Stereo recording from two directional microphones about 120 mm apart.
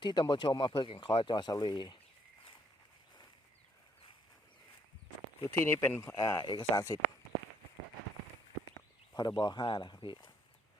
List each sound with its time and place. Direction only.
0.0 s speech: 40° left (ahead or behind)
5.4 s speech: 20° left (ahead or behind)
6.4 s speech: 40° left (ahead or behind)
9.1 s speech: 35° left (ahead or behind)